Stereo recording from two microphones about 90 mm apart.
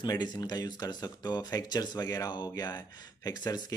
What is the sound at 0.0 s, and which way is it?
Speech, 55° left (ahead or behind).